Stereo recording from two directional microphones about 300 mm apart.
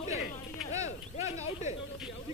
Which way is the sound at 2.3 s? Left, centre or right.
Centre.